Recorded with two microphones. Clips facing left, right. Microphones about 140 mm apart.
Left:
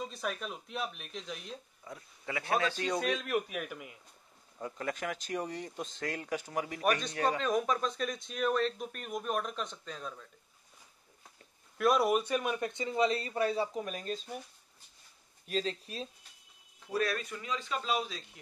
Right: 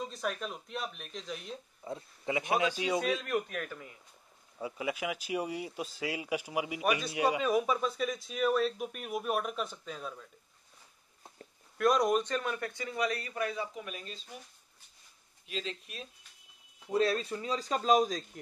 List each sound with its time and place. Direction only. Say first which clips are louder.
0.0 s a man's voice: right 1 dB; centre (ahead or behind)
1.9 s a man's voice: right 6 dB; 25° right (ahead or behind); by 3.9 s 10° left (ahead or behind)
4.6 s speech: right 2 dB; 5° right (ahead or behind)
11.8 s a man's voice: even; 5° left (ahead or behind); by 14.2 s 40° left (ahead or behind)
15.4 s speech: left 5 dB; 40° left (ahead or behind)
16.9 s speech: right 4 dB; 25° right (ahead or behind); by 18.4 s 45° right (ahead or behind)